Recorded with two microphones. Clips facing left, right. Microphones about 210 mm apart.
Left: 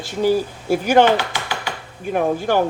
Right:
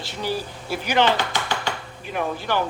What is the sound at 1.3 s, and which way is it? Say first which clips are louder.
Typing: even; 10° left (ahead or behind).